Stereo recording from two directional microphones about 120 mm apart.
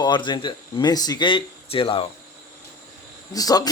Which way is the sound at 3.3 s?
30° left (ahead or behind).